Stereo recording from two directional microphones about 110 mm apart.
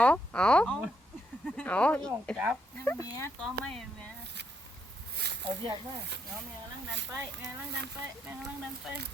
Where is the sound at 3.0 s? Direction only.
25° left (ahead or behind).